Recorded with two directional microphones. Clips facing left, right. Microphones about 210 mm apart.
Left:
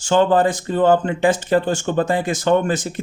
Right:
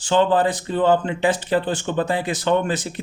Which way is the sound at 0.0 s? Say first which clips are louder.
Left 2 dB; 45° left (ahead or behind).